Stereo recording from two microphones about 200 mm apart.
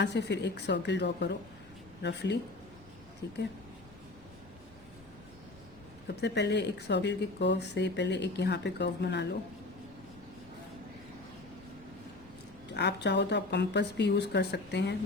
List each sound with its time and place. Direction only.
0.0 s speech: 60° left (ahead or behind)
6.1 s speech: 60° left (ahead or behind)
12.7 s speech: 55° left (ahead or behind)